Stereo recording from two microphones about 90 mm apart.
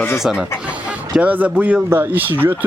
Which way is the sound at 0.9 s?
15° right (ahead or behind).